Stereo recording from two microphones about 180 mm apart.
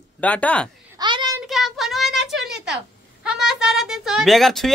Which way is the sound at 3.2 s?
5° right (ahead or behind).